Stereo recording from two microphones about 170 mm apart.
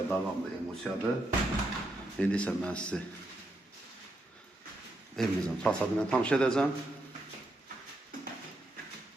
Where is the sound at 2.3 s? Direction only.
5° left (ahead or behind).